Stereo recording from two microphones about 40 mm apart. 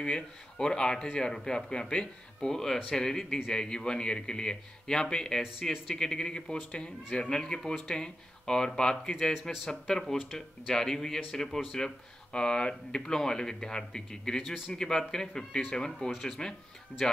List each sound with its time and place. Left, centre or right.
0.0 s speech: left
5.6 s speech: centre
6.0 s speech: centre